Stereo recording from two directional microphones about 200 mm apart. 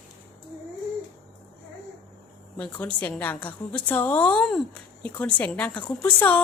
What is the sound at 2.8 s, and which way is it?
A woman's voice, 5° left (ahead or behind).